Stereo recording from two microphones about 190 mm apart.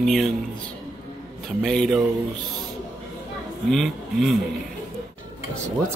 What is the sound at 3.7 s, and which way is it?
Speech, centre (ahead or behind).